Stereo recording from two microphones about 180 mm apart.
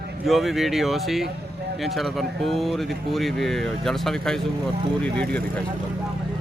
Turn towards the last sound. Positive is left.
turn(degrees=5)  # may be behind; listen again after turning